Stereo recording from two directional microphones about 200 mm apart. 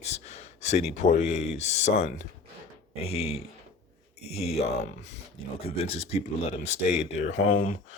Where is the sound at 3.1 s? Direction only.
30° left (ahead or behind).